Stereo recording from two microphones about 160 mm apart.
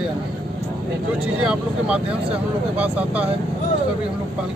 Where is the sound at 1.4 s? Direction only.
5° right (ahead or behind).